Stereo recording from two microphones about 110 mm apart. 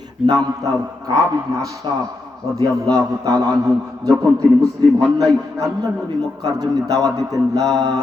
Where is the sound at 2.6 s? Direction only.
30° right (ahead or behind).